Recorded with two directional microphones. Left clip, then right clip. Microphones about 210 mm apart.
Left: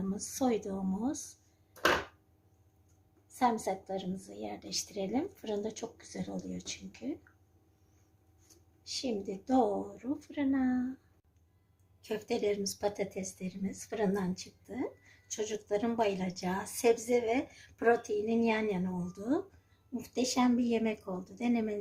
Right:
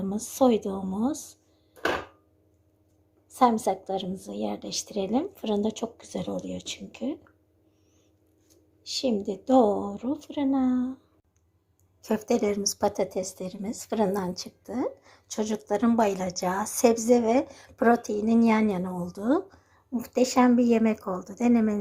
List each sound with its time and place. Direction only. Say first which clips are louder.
0.2 s a woman's voice: right 11 dB; 25° right (ahead or behind)
3.3 s a woman's voice: right 8 dB; 25° right (ahead or behind)
8.8 s a woman's voice: right 9 dB; 25° right (ahead or behind)
12.3 s a woman's voice: right 6 dB; 20° right (ahead or behind)